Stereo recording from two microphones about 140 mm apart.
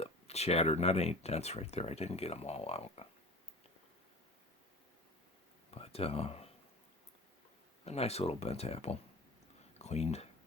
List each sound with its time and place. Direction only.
0.0 s speech: 50° left (ahead or behind)
5.7 s speech: 45° left (ahead or behind)
7.9 s speech: 45° left (ahead or behind)